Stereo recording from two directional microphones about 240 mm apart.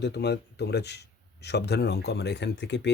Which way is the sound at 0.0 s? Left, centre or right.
Left.